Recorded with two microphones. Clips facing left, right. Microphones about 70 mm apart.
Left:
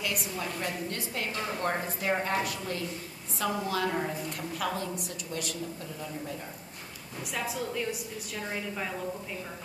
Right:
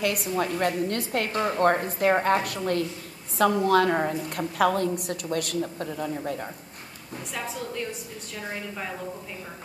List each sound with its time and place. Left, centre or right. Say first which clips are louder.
0.0 s a woman's voice: right 8 dB; right
7.3 s a woman's voice: even; centre